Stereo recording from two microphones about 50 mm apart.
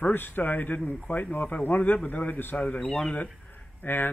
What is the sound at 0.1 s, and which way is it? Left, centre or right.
A man's voice, left.